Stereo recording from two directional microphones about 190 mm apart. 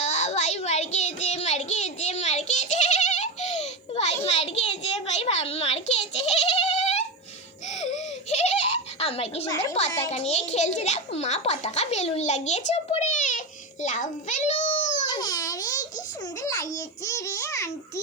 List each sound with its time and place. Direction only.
0.0 s child singing: 35° left (ahead or behind)
7.7 s baby laughter: 40° left (ahead or behind)
10.1 s a child's voice: 35° left (ahead or behind)
13.8 s a sound: 40° left (ahead or behind)
15.1 s babbling: 20° left (ahead or behind)
16.4 s a child's voice: 20° left (ahead or behind)